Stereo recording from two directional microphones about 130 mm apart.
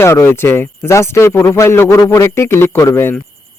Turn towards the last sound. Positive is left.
turn(degrees=20)  # may be behind; listen again after turning